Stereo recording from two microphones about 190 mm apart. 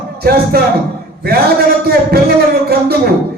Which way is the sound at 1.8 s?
55° right (ahead or behind).